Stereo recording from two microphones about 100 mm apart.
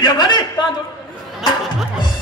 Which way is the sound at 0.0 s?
50° left (ahead or behind).